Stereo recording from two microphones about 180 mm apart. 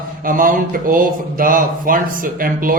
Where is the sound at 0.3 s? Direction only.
50° right (ahead or behind).